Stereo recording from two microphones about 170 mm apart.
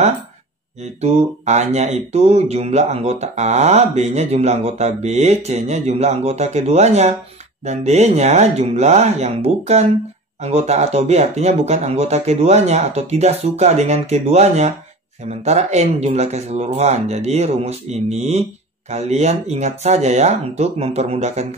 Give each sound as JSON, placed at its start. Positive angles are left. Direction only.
{"t": 1.0, "sound": "speech", "side_deg": -40}